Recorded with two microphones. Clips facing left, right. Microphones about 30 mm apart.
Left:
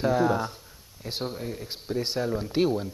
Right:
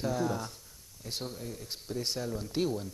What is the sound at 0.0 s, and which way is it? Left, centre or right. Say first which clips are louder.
Speech: left 8 dB; left.